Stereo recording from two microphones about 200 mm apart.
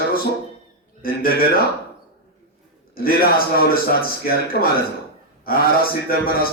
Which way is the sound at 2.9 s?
45° left (ahead or behind).